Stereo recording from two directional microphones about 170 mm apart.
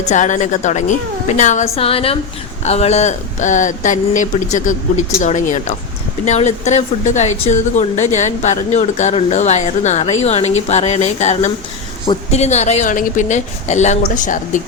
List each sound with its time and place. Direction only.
0.1 s a woman's voice: 45° left (ahead or behind)